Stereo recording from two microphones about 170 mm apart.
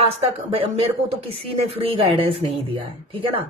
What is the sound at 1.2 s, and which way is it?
Speech, 35° right (ahead or behind).